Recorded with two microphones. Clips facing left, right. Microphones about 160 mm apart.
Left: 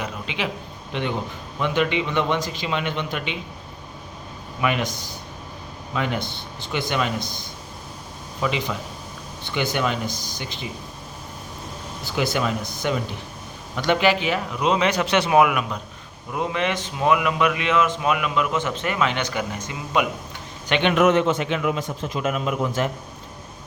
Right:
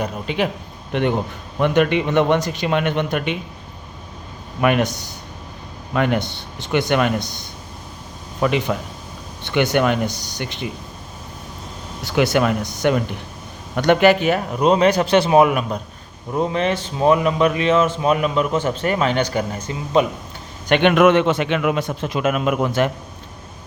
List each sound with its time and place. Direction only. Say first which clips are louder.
0.0 s a man's voice: right 6 dB; 45° right (ahead or behind)
4.6 s speech: right 6 dB; 55° right (ahead or behind)
5.9 s speech: right 6 dB; 55° right (ahead or behind)
8.4 s speech: right 6 dB; 55° right (ahead or behind)
12.1 s a man's voice: right 6 dB; 60° right (ahead or behind); by 20.1 s 30° right (ahead or behind)
20.7 s a man's voice: right 6 dB; 50° right (ahead or behind)
20.9 s a man's voice: right 1 dB; 80° right